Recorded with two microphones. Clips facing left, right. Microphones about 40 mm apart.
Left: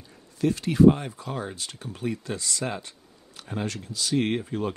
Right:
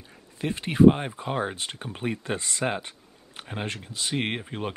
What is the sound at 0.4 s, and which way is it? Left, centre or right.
Speech, right.